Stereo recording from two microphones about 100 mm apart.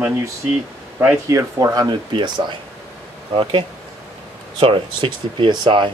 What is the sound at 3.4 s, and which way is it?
Speech, 60° right (ahead or behind).